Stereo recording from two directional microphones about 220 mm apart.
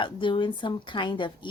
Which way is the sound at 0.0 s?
20° left (ahead or behind).